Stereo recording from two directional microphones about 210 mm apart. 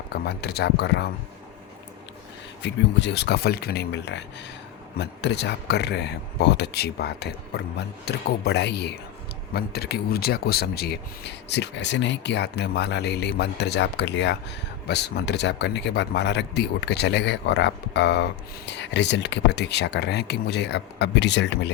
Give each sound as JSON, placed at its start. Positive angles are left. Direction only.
{"t": 0.1, "sound": "speech", "side_deg": 50}
{"t": 2.6, "sound": "speech", "side_deg": 55}